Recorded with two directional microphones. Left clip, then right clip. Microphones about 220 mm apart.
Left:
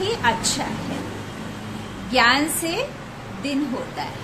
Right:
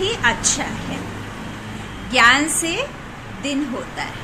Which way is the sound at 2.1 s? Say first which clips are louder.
Right 4 dB; 5° left (ahead or behind).